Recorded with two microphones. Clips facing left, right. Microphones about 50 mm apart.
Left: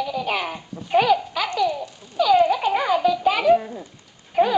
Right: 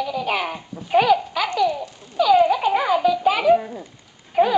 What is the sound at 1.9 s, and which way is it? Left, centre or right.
Babbling, centre.